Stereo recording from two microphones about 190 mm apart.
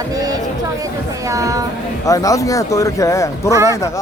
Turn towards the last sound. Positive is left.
turn(degrees=15)  # may be behind; listen again after turning